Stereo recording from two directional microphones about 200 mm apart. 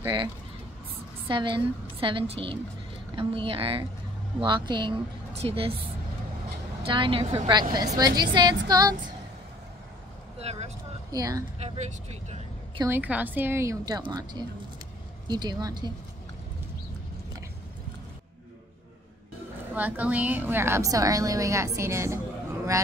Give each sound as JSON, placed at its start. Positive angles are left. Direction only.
{"t": 0.0, "sound": "a woman's voice", "side_deg": -20}
{"t": 6.8, "sound": "a woman's voice", "side_deg": -25}
{"t": 10.4, "sound": "vehicle", "side_deg": -30}
{"t": 11.1, "sound": "a woman's voice", "side_deg": -20}
{"t": 11.6, "sound": "speech", "side_deg": -35}
{"t": 12.8, "sound": "a woman's voice", "side_deg": -10}
{"t": 19.7, "sound": "a woman's voice", "side_deg": -10}